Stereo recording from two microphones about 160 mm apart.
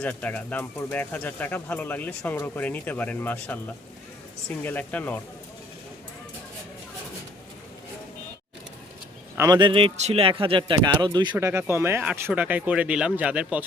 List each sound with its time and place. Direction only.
0.0 s speech: 10° left (ahead or behind)
4.6 s speech: 10° left (ahead or behind)
9.4 s a man's voice: 25° right (ahead or behind)
11.3 s speech: 15° right (ahead or behind)